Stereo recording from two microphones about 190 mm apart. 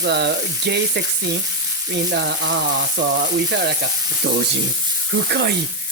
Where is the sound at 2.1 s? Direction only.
65° right (ahead or behind).